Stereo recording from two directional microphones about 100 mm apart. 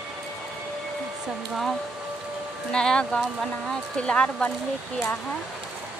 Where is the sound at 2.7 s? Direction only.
5° left (ahead or behind).